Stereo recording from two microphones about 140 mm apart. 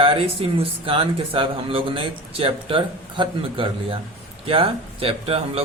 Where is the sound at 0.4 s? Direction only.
40° right (ahead or behind).